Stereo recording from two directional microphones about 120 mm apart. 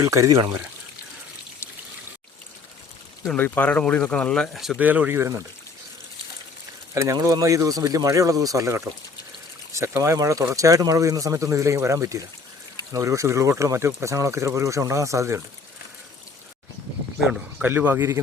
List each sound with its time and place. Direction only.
0.0 s speech: 25° right (ahead or behind)
3.3 s speech: 15° left (ahead or behind)
4.8 s speech: 15° right (ahead or behind)
6.9 s speech: 25° right (ahead or behind)
17.6 s speech: 15° right (ahead or behind)